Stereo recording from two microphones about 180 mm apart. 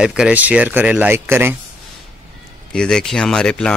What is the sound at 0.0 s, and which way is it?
Speech, 5° right (ahead or behind).